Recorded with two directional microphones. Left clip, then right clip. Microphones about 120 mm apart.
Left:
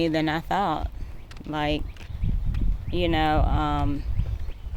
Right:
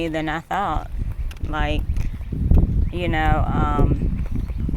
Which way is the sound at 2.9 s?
30° left (ahead or behind).